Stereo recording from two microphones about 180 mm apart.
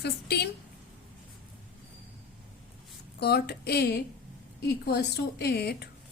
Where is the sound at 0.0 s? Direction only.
65° left (ahead or behind).